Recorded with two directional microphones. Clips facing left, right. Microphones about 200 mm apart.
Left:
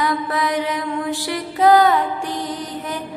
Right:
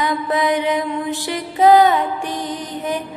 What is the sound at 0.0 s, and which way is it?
Mantra, 20° right (ahead or behind).